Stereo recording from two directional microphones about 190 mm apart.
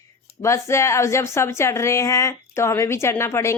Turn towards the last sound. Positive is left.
turn(degrees=15)  # may be behind; listen again after turning